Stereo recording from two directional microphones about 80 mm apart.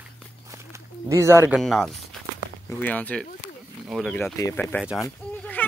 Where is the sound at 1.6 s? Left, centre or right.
Centre.